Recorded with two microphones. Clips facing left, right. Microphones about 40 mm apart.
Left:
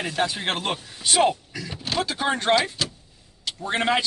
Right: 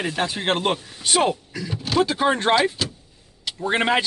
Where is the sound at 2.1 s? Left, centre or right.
Centre.